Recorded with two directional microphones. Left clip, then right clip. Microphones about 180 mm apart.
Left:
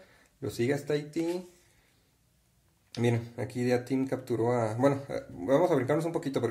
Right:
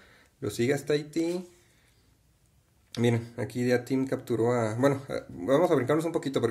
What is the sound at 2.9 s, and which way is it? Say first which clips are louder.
Speech: right 2 dB; 25° right (ahead or behind).